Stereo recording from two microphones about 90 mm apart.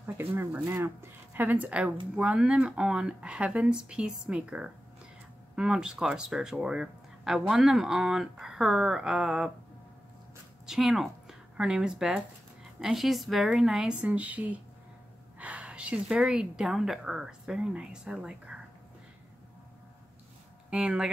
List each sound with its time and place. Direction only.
0.0 s speech: 25° right (ahead or behind); by 9.5 s 5° right (ahead or behind)
10.7 s a woman's voice: centre (ahead or behind)
14.0 s speech: 15° right (ahead or behind)
20.7 s speech: 10° right (ahead or behind)